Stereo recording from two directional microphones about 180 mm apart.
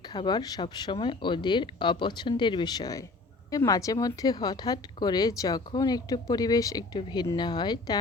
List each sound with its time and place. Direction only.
0.1 s speech: 25° left (ahead or behind)